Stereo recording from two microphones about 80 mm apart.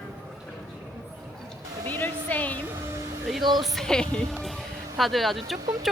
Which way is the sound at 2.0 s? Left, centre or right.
Left.